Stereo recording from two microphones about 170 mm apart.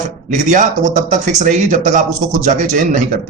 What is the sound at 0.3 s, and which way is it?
A man's voice, 50° right (ahead or behind).